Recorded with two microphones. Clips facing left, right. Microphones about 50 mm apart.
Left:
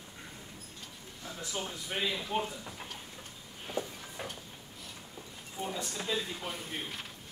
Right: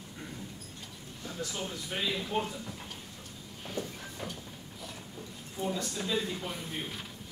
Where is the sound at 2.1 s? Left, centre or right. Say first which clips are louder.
Right 1 dB; centre.